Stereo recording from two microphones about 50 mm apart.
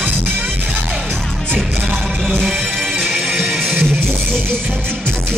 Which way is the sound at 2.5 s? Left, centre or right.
Centre.